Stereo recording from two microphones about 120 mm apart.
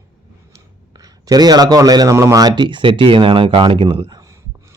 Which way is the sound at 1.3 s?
35° right (ahead or behind).